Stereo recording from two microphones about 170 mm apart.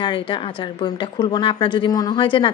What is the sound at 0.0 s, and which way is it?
Speech, 30° left (ahead or behind).